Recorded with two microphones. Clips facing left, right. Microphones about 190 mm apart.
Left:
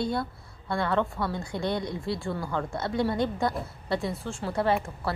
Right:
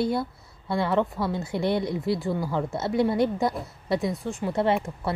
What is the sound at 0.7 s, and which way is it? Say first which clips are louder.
A woman's voice: right 3 dB; 20° right (ahead or behind).